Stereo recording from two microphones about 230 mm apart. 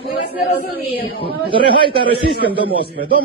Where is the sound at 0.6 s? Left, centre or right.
Left.